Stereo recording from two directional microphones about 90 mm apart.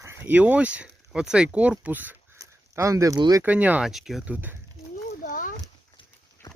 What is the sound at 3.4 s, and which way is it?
Speech, 15° right (ahead or behind).